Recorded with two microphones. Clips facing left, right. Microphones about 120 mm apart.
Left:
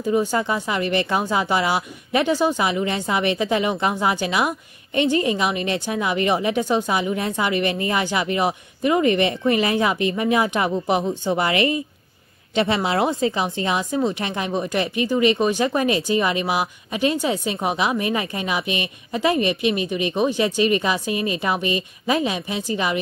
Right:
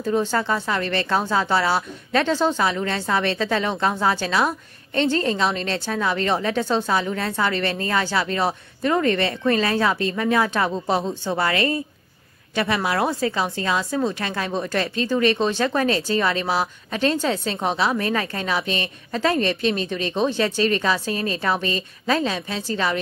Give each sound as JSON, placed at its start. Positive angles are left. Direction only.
{"t": 0.0, "sound": "a woman's voice", "side_deg": 15}